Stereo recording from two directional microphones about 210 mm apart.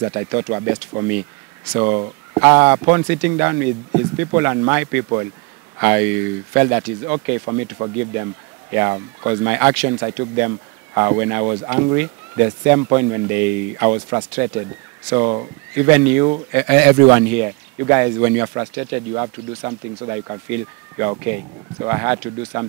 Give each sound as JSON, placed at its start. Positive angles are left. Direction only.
{"t": 0.0, "sound": "speech", "side_deg": -15}
{"t": 7.4, "sound": "speech", "side_deg": -20}
{"t": 15.7, "sound": "speech", "side_deg": -10}